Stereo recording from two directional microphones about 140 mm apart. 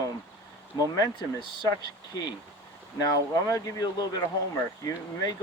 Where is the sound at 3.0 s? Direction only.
25° left (ahead or behind).